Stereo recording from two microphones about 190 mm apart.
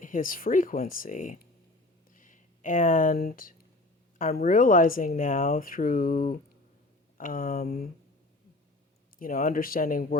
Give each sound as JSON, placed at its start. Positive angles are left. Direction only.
{"t": 0.0, "sound": "speech", "side_deg": 45}
{"t": 9.1, "sound": "speech", "side_deg": 50}